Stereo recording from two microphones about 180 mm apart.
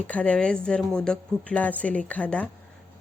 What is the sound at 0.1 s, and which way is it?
A woman's voice, 5° left (ahead or behind).